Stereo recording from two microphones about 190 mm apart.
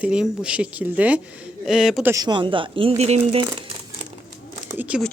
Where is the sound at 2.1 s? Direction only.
25° right (ahead or behind).